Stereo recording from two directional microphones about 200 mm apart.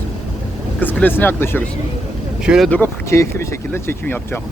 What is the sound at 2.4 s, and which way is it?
Speech, centre (ahead or behind).